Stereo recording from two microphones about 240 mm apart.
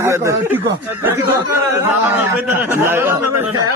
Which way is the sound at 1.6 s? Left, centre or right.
Centre.